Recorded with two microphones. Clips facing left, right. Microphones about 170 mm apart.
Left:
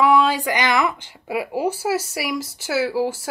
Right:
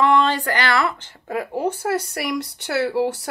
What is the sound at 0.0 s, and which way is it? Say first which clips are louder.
Speech: left 1 dB; 10° left (ahead or behind).